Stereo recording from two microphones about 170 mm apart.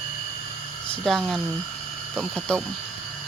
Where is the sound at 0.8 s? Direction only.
5° left (ahead or behind).